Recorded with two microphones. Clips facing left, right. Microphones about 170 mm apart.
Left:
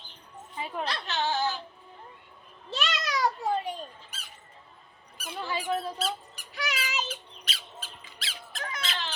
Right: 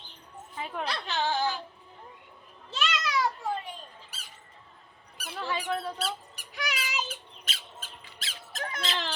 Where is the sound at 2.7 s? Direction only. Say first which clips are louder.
Right 1 dB; 40° left (ahead or behind).